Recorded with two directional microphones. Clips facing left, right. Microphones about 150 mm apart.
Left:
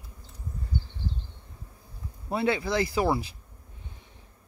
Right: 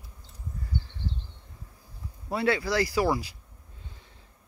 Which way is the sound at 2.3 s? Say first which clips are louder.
Even; 20° left (ahead or behind).